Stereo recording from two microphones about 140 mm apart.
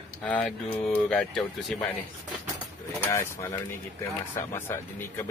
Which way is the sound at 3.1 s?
20° left (ahead or behind).